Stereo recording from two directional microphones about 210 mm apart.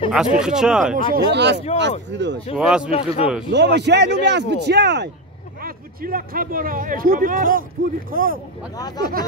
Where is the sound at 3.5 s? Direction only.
55° right (ahead or behind).